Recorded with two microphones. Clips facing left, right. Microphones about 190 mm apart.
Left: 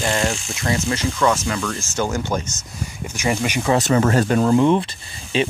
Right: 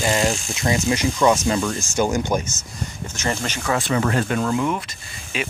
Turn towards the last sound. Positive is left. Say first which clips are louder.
# left 7 dB
turn(degrees=30)  # may be behind; listen again after turning